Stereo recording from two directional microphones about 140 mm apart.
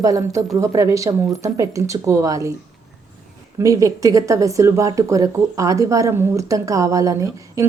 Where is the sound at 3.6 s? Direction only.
25° right (ahead or behind).